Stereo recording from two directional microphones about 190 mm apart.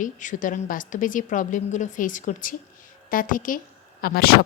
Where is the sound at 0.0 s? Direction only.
40° left (ahead or behind).